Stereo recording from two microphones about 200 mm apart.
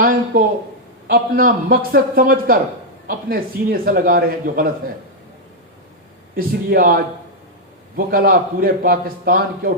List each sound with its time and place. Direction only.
0.0 s a sound: 45° right (ahead or behind)
1.0 s a man's voice: 45° right (ahead or behind)
6.3 s a man's voice: 45° right (ahead or behind)